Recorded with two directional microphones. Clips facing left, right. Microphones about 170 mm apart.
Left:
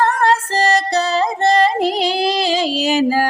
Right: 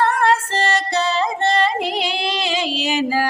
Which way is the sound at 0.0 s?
40° left (ahead or behind).